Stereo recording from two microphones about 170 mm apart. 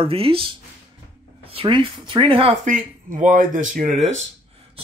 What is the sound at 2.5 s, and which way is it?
Speech, 50° right (ahead or behind).